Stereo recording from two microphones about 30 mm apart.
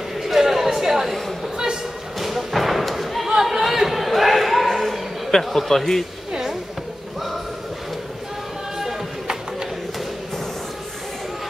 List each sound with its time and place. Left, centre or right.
0.2 s chatter: centre
2.1 s thump: centre
3.3 s chatter: centre
3.6 s a sound: centre
5.4 s speech: centre